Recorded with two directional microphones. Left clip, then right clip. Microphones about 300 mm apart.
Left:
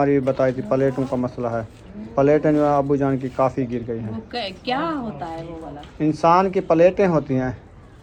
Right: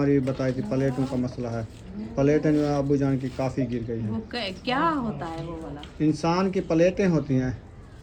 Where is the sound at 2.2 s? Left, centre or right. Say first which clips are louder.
Left 6 dB; centre.